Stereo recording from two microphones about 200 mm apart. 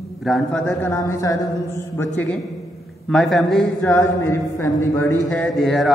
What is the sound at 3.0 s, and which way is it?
Speech, centre (ahead or behind).